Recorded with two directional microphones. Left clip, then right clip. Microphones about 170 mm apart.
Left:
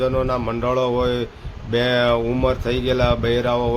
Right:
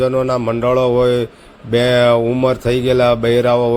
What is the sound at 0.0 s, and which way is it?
A man's voice, 30° right (ahead or behind).